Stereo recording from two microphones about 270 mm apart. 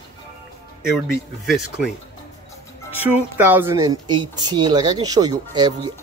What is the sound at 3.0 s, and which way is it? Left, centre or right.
Speech, centre.